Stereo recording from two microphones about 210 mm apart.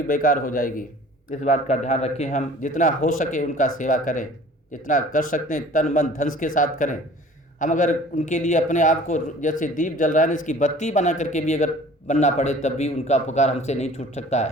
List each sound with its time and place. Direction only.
0.1 s a man's voice: 40° left (ahead or behind)